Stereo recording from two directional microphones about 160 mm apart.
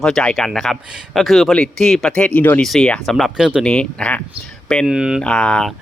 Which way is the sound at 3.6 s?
5° left (ahead or behind).